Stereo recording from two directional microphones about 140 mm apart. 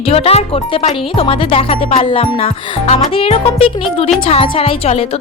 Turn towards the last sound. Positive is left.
turn(degrees=45)  # may be behind; listen again after turning